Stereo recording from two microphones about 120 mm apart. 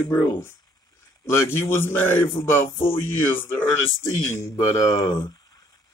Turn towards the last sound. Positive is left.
turn(degrees=30)  # may be behind; listen again after turning